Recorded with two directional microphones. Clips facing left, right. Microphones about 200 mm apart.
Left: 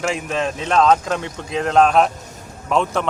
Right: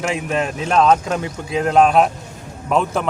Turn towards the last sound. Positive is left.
turn(degrees=-5)  # may be behind; listen again after turning